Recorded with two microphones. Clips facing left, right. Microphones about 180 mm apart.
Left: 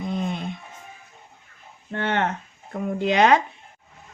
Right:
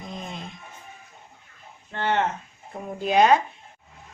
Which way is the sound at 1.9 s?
60° left (ahead or behind).